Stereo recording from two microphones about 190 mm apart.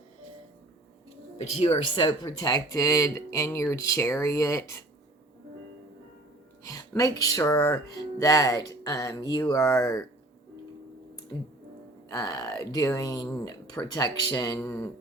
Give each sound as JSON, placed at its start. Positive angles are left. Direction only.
{"t": 1.1, "sound": "speech", "side_deg": 35}
{"t": 6.7, "sound": "speech", "side_deg": 20}
{"t": 12.0, "sound": "speech", "side_deg": 20}